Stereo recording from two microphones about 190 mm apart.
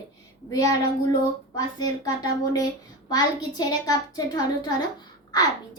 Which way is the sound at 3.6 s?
20° left (ahead or behind).